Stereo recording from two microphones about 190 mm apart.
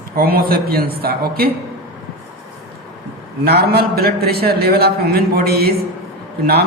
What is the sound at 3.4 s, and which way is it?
A man's voice, 55° right (ahead or behind).